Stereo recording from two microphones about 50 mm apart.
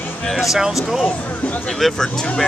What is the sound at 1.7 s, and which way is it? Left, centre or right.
Speech, centre.